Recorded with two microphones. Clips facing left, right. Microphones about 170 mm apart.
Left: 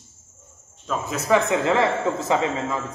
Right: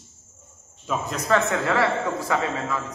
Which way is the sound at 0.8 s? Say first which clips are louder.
Even; 5° right (ahead or behind).